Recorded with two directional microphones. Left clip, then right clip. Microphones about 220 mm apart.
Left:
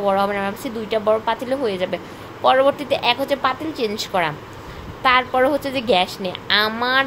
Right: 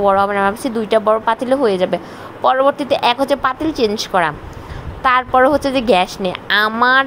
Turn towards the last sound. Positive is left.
turn(degrees=-20)  # may be behind; listen again after turning